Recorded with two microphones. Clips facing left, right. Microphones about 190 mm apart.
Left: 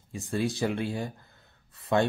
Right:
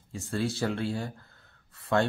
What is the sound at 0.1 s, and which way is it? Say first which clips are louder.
Speech: left 1 dB; 15° left (ahead or behind).